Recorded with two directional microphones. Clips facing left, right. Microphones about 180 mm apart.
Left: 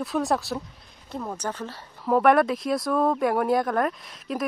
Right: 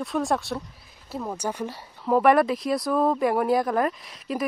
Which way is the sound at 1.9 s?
Centre (ahead or behind).